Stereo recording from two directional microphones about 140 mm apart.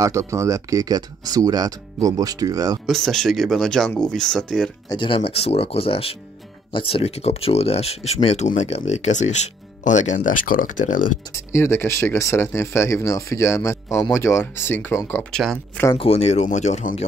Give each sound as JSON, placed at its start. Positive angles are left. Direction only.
{"t": 0.0, "sound": "speech", "side_deg": -20}
{"t": 2.9, "sound": "speech", "side_deg": 5}
{"t": 4.8, "sound": "speech", "side_deg": 35}
{"t": 11.3, "sound": "speech", "side_deg": 20}
{"t": 15.3, "sound": "speech", "side_deg": 5}
{"t": 16.0, "sound": "speech", "side_deg": 50}